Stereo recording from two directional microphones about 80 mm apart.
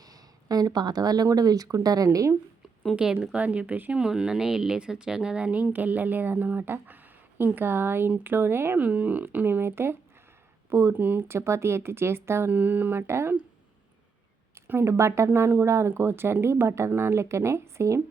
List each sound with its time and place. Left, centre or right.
0.0 s speech: right
2.9 s speech: centre
4.0 s speech: centre; by 8.8 s right
8.8 s speech: centre
14.7 s speech: right